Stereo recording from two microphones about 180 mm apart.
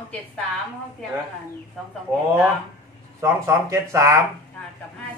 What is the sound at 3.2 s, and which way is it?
A man's voice, 15° right (ahead or behind).